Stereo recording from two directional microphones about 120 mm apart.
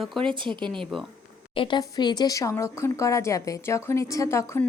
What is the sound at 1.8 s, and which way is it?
Speech, 35° left (ahead or behind).